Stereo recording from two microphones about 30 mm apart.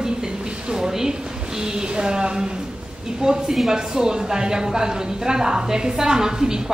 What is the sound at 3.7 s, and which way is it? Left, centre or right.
A woman's voice, right.